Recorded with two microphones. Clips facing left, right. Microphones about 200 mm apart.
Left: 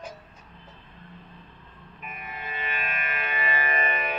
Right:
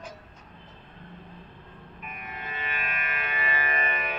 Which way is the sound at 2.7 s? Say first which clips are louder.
Left 2 dB; 25° left (ahead or behind).